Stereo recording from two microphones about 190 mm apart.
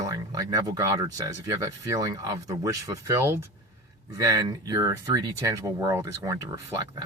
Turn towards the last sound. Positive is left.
turn(degrees=-15)  # may be behind; listen again after turning